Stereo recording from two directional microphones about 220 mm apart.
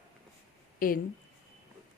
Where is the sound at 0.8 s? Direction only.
40° left (ahead or behind).